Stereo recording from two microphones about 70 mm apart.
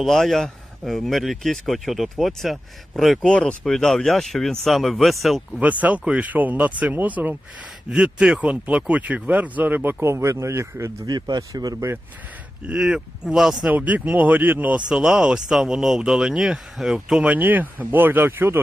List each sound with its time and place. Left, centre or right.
0.0 s speech: centre
5.8 s speech: right
10.0 s speech: right
11.0 s speech: right
12.6 s speech: centre
13.7 s speech: right
17.2 s speech: right